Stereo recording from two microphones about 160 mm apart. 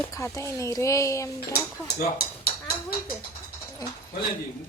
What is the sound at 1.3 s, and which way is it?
Speech, 75° left (ahead or behind).